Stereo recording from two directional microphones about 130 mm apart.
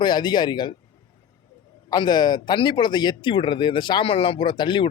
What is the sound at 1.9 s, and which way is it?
Speech, 35° left (ahead or behind).